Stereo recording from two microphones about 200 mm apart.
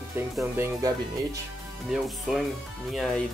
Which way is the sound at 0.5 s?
10° right (ahead or behind).